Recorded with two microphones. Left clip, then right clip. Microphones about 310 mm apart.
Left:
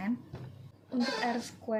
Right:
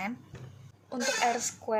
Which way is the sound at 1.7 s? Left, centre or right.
Right.